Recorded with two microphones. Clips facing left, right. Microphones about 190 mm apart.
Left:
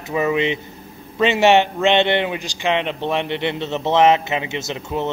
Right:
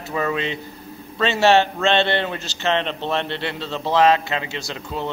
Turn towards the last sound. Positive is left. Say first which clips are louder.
# left 4 dB
turn(degrees=20)  # may be behind; listen again after turning